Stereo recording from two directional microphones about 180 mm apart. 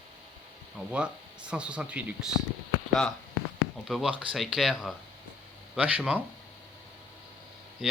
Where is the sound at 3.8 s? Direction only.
5° right (ahead or behind).